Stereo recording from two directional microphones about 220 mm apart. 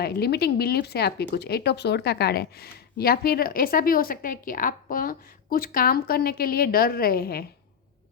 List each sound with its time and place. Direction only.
0.0 s speech: 45° left (ahead or behind)